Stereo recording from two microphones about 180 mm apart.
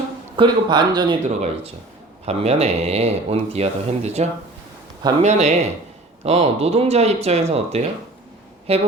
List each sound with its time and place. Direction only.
0.3 s speech: 25° right (ahead or behind)
2.2 s speech: 35° right (ahead or behind)